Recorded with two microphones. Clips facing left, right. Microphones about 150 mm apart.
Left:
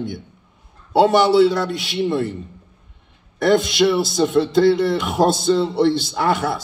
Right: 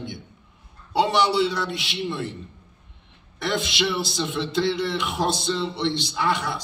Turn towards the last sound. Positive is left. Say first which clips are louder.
# left 5 dB
turn(degrees=50)  # may be behind; listen again after turning